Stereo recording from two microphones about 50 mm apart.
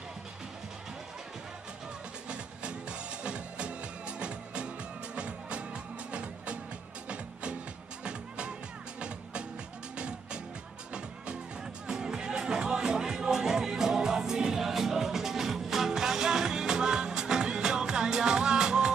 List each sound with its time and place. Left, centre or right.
2.2 s music: centre
8.0 s music: right
9.9 s music: right